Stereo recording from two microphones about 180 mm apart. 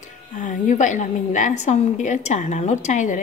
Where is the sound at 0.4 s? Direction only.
45° left (ahead or behind).